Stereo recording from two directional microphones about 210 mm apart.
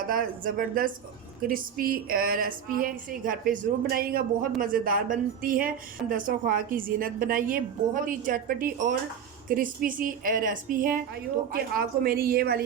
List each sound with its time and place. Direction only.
0.0 s speech: 40° right (ahead or behind)